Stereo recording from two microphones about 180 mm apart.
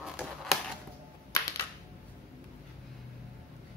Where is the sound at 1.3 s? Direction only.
20° left (ahead or behind).